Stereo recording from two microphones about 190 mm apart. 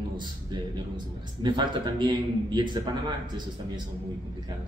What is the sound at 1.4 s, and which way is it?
A man's voice, 25° right (ahead or behind).